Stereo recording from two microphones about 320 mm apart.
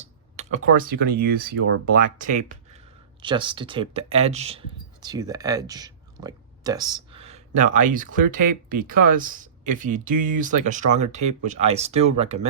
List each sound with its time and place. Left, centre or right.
0.3 s speech: right